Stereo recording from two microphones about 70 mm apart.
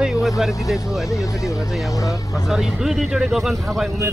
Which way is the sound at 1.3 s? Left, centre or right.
Left.